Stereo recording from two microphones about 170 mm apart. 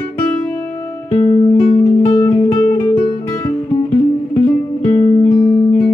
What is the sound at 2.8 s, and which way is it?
Music, 30° left (ahead or behind).